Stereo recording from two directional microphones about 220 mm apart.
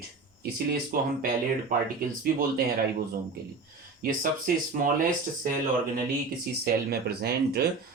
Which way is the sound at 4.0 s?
40° right (ahead or behind).